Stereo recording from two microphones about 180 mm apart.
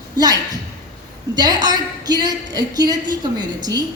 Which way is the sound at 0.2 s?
20° right (ahead or behind).